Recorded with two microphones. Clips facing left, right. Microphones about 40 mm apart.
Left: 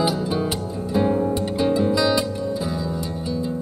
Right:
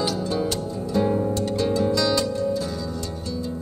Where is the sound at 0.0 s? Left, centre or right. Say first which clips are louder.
Left 2 dB; centre.